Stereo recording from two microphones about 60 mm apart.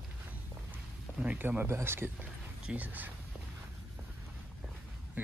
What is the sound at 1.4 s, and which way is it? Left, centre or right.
Speech, right.